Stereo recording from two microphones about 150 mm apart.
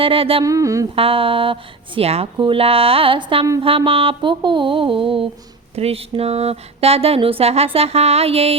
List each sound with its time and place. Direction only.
0.0 s music: 40° right (ahead or behind)
0.4 s a sound: 20° right (ahead or behind)
0.9 s music: 35° right (ahead or behind)
5.7 s speech: 40° right (ahead or behind)